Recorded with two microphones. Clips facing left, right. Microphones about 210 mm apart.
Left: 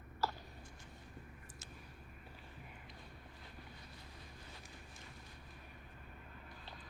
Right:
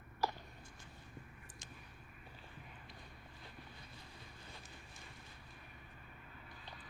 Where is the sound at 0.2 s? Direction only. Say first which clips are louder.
Right 1 dB; 15° right (ahead or behind).